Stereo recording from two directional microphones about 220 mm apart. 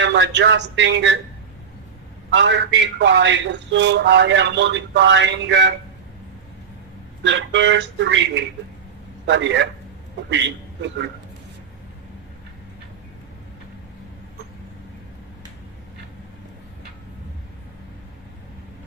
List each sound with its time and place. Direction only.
0.0 s a man's voice: 55° right (ahead or behind)
2.3 s a man's voice: 55° right (ahead or behind)
7.2 s a man's voice: 55° right (ahead or behind)